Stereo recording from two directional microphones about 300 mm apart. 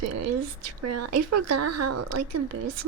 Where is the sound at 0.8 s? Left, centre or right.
Right.